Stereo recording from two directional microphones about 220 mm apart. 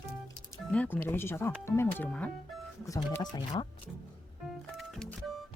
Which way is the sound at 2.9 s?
15° left (ahead or behind).